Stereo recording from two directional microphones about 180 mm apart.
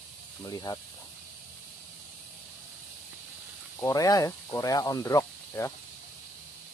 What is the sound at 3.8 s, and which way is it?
Speech, 20° left (ahead or behind).